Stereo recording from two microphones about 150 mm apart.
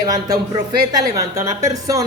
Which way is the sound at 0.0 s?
25° right (ahead or behind).